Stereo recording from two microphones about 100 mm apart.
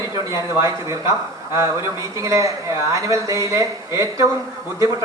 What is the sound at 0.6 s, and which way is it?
Speech, 30° right (ahead or behind).